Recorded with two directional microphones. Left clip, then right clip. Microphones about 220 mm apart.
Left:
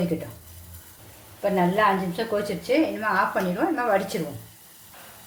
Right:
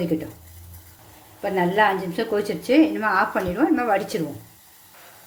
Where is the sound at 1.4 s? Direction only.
30° right (ahead or behind).